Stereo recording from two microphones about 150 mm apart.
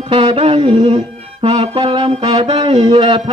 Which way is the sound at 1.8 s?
30° right (ahead or behind).